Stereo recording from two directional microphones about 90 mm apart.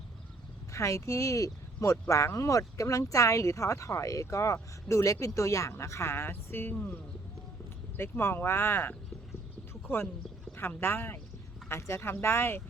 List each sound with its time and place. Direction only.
0.7 s speech: 35° left (ahead or behind)
6.7 s speech: 15° left (ahead or behind)
7.9 s speech: 25° left (ahead or behind)